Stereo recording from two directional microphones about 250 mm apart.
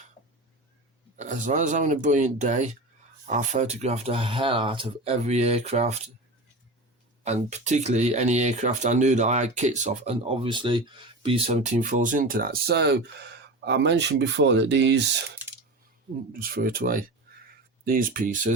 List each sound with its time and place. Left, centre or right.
1.1 s speech: right
7.3 s speech: right
16.3 s speech: right